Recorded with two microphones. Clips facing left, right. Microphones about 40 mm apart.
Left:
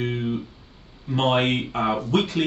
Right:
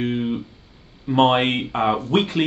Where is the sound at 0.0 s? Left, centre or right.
Right.